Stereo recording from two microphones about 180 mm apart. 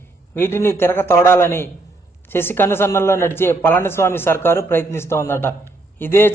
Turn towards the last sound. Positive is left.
turn(degrees=10)  # may be behind; listen again after turning